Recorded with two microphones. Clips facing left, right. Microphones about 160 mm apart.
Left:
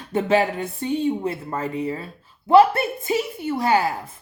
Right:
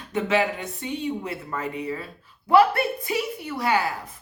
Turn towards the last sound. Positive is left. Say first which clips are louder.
# left 4 dB
turn(degrees=25)  # may be behind; listen again after turning